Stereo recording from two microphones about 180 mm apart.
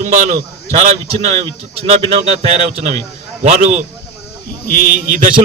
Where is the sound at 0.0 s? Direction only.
40° right (ahead or behind).